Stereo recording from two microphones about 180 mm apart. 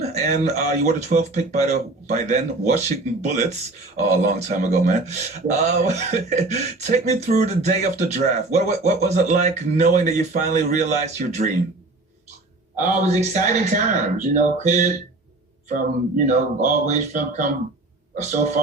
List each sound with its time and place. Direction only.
0.1 s speech: 40° right (ahead or behind)
12.8 s speech: 40° right (ahead or behind)